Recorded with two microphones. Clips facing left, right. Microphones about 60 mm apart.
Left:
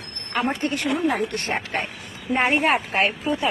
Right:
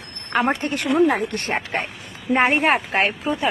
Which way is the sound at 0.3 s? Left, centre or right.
Right.